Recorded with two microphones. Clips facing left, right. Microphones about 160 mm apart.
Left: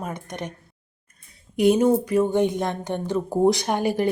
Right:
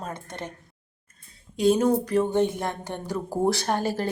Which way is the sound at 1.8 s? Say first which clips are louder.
Left 3 dB; 10° left (ahead or behind).